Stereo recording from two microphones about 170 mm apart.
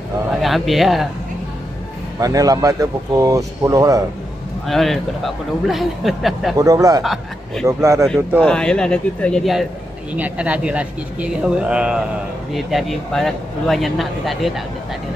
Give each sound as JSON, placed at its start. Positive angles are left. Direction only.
{"t": 0.4, "sound": "a man's voice", "side_deg": 0}
{"t": 2.1, "sound": "speech", "side_deg": -20}
{"t": 4.6, "sound": "speech", "side_deg": 0}
{"t": 6.5, "sound": "speech", "side_deg": -20}
{"t": 7.0, "sound": "speech", "side_deg": 0}
{"t": 7.6, "sound": "speech", "side_deg": -15}
{"t": 8.4, "sound": "speech", "side_deg": 5}